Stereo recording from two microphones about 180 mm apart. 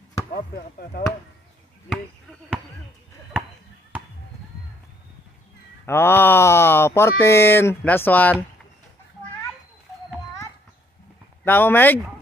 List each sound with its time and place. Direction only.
0.3 s speech: 50° left (ahead or behind)
5.9 s speech: 15° left (ahead or behind)
11.4 s speech: 10° left (ahead or behind)